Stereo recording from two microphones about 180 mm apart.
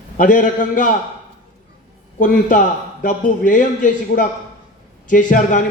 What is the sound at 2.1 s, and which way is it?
A man's voice, 45° left (ahead or behind).